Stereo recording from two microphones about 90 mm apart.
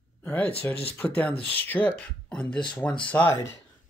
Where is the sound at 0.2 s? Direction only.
20° left (ahead or behind).